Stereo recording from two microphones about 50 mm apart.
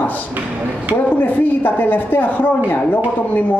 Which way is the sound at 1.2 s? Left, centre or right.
Left.